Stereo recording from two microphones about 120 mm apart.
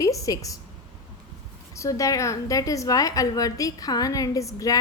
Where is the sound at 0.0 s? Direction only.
30° left (ahead or behind).